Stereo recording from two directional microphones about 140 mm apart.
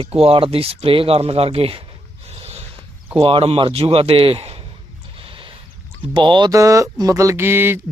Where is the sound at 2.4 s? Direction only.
50° right (ahead or behind).